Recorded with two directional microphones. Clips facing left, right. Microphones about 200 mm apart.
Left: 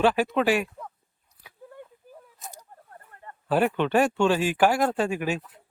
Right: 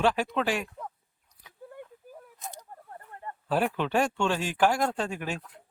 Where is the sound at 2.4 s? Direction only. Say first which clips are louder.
Right 2 dB; 10° left (ahead or behind).